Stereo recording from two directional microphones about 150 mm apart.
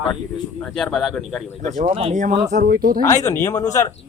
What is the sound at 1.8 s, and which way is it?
Speech, 45° right (ahead or behind).